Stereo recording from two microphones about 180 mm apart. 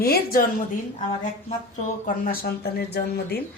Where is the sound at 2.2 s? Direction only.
55° left (ahead or behind).